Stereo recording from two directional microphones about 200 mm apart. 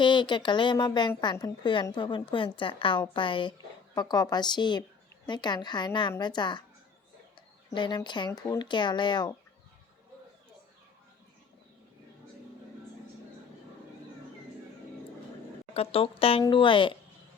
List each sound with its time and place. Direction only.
0.0 s speech: 25° left (ahead or behind)
7.7 s speech: 25° left (ahead or behind)
15.7 s speech: 30° left (ahead or behind)